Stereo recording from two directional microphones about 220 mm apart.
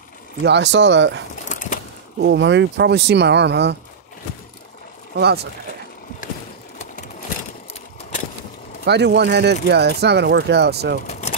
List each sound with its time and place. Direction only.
0.4 s speech: 50° right (ahead or behind)
1.5 s a sound: 35° left (ahead or behind)
2.1 s speech: 50° right (ahead or behind)
5.2 s speech: 50° right (ahead or behind)
8.8 s speech: 50° right (ahead or behind)
11.1 s a sound: 30° left (ahead or behind)